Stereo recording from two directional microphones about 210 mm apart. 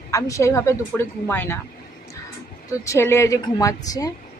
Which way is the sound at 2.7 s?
15° left (ahead or behind).